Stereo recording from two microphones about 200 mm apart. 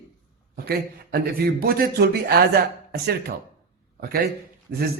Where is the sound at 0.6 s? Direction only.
50° right (ahead or behind).